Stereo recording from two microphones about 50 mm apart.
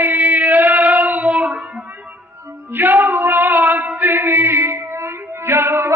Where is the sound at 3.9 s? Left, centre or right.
Right.